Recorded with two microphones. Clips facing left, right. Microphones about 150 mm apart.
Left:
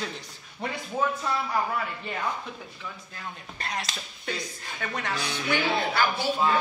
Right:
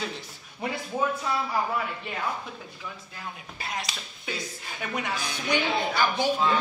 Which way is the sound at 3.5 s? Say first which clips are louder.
Left 1 dB; 5° right (ahead or behind).